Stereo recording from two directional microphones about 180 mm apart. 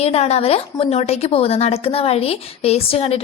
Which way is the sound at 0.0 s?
35° left (ahead or behind).